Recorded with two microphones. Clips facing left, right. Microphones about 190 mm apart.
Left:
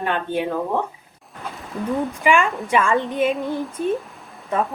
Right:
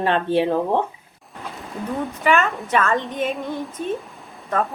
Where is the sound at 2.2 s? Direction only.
10° left (ahead or behind).